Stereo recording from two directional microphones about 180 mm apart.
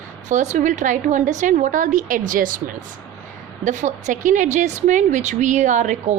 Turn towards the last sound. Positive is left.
turn(degrees=-40)  # may be behind; listen again after turning